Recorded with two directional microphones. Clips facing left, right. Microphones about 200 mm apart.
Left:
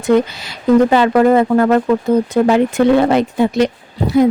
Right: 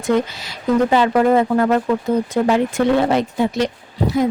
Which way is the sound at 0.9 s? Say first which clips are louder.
Left 3 dB; 70° left (ahead or behind).